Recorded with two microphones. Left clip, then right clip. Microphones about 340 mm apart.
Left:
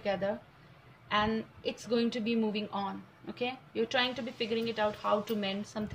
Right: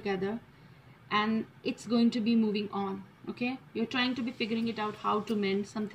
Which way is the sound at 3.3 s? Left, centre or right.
Centre.